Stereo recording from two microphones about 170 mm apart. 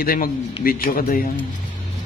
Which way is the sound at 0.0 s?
60° left (ahead or behind).